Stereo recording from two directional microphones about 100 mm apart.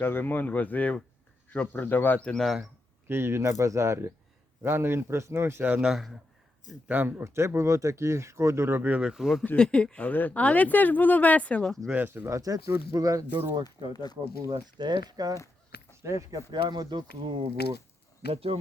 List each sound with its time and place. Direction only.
0.0 s speech: 20° left (ahead or behind); by 2.6 s centre (ahead or behind)
3.1 s speech: 25° right (ahead or behind)
5.6 s speech: 15° right (ahead or behind)
5.9 s speech: centre (ahead or behind)
6.8 s speech: 20° right (ahead or behind)
9.4 s speech: 10° left (ahead or behind)
11.9 s speech: 20° right (ahead or behind); by 13.2 s 35° right (ahead or behind)
13.9 s speech: 40° left (ahead or behind)
14.3 s speech: 35° right (ahead or behind)
14.8 s speech: 45° right (ahead or behind)
15.9 s speech: 30° right (ahead or behind)
16.5 s speech: 45° right (ahead or behind)
18.3 s speech: 75° right (ahead or behind)